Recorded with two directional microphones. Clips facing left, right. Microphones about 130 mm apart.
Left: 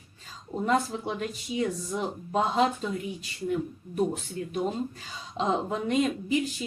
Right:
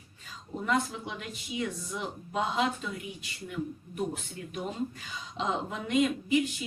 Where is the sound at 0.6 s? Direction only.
35° left (ahead or behind).